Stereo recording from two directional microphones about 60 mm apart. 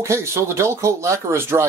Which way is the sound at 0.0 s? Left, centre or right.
Right.